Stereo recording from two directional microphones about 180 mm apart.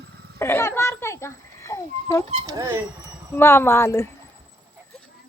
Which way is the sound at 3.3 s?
15° left (ahead or behind).